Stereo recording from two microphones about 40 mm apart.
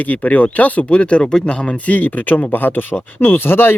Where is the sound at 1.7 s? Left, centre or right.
Left.